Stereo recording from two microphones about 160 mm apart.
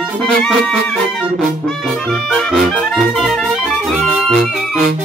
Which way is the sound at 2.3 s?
Centre (ahead or behind).